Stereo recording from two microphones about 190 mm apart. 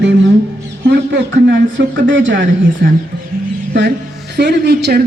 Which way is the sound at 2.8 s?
60° right (ahead or behind).